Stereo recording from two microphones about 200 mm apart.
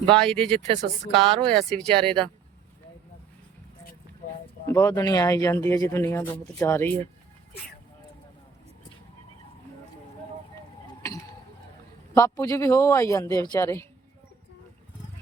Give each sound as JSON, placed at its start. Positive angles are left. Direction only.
{"t": 0.1, "sound": "speech", "side_deg": 5}
{"t": 0.7, "sound": "a woman's voice", "side_deg": -25}
{"t": 1.5, "sound": "speech", "side_deg": 5}
{"t": 4.7, "sound": "speech", "side_deg": 15}
{"t": 12.1, "sound": "speech", "side_deg": 15}